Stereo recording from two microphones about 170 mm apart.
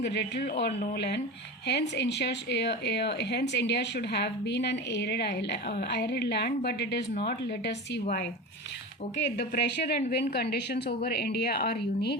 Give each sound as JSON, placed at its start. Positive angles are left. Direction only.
{"t": 0.0, "sound": "speech", "side_deg": 85}
{"t": 9.1, "sound": "a woman's voice", "side_deg": 75}